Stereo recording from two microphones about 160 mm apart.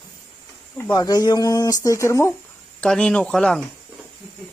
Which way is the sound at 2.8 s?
5° left (ahead or behind).